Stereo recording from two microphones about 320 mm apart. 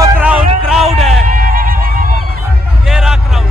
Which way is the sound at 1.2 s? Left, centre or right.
Right.